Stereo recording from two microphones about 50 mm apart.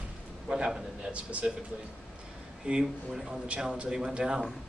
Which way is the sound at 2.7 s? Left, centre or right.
Right.